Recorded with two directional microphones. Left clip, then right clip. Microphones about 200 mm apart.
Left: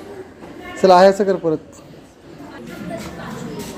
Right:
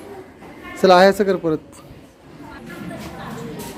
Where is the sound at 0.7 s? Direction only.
15° right (ahead or behind).